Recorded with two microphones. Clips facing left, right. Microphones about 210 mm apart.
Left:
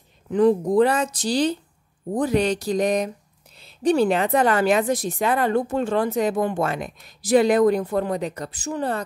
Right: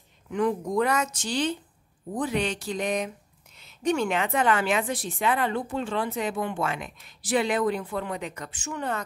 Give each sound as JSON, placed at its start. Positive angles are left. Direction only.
{"t": 0.3, "sound": "a woman's voice", "side_deg": 35}